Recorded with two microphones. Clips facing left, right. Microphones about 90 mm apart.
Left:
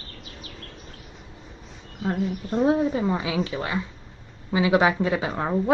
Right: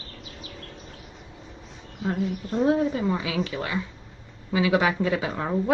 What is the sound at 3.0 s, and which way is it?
Speech, 25° left (ahead or behind).